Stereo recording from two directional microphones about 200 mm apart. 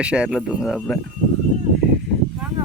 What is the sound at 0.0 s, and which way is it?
Speech, 5° right (ahead or behind).